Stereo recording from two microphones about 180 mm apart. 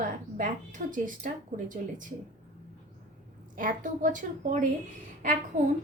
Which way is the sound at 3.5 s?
50° right (ahead or behind).